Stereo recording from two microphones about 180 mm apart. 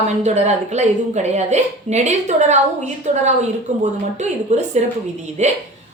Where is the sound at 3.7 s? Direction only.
40° right (ahead or behind).